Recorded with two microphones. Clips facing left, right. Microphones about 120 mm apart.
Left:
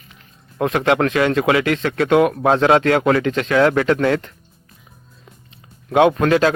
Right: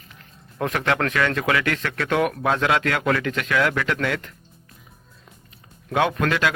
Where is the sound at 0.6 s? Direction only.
25° left (ahead or behind).